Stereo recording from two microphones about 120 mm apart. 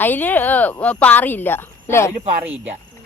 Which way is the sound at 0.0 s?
15° left (ahead or behind).